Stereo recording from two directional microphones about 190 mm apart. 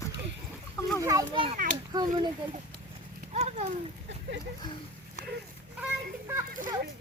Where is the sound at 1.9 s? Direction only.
20° right (ahead or behind).